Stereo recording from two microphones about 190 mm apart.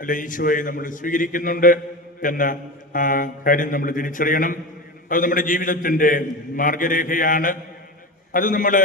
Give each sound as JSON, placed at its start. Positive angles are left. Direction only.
{"t": 0.0, "sound": "a man's voice", "side_deg": 45}